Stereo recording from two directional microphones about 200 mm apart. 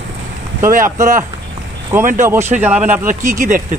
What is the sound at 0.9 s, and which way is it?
Speech, 40° right (ahead or behind).